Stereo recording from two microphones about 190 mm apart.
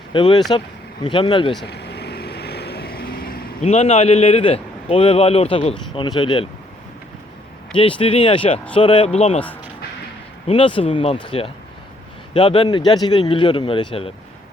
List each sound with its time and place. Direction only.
0.1 s speech: 25° left (ahead or behind)
1.6 s vehicle: 60° left (ahead or behind)
3.6 s a man's voice: 35° left (ahead or behind)
7.7 s a man's voice: 25° left (ahead or behind)
10.4 s speech: 30° left (ahead or behind)